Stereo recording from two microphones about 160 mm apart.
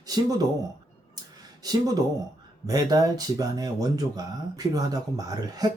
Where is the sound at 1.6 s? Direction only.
25° right (ahead or behind).